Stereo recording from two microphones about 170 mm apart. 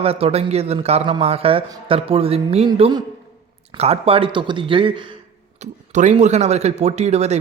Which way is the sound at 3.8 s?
35° right (ahead or behind).